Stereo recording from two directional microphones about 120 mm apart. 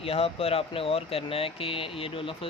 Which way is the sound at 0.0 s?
55° left (ahead or behind).